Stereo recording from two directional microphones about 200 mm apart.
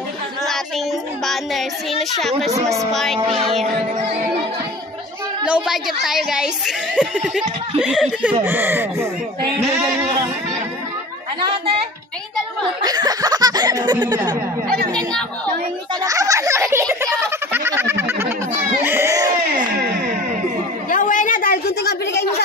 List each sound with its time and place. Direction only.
1.2 s a child's voice: centre (ahead or behind)
2.5 s a child's voice: 15° right (ahead or behind)
2.9 s a child's voice: centre (ahead or behind)
3.2 s chuckle: 25° right (ahead or behind)
4.0 s speech: 35° right (ahead or behind)
5.4 s a child's voice: 5° right (ahead or behind)
12.8 s chuckle: 20° right (ahead or behind)
16.0 s a child's voice: 15° right (ahead or behind)
17.0 s a sound: 15° right (ahead or behind)
19.5 s music: 45° right (ahead or behind)
20.9 s a sound: 40° left (ahead or behind); by 22.2 s 55° left (ahead or behind)